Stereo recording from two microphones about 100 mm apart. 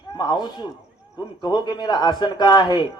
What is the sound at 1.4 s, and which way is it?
A man's voice, 45° left (ahead or behind).